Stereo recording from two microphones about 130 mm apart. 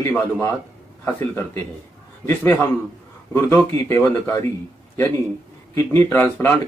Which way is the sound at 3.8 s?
20° left (ahead or behind).